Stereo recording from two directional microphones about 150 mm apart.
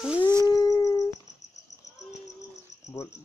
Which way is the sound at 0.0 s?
10° right (ahead or behind).